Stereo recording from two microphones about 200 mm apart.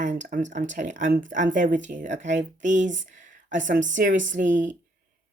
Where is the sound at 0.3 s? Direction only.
40° right (ahead or behind).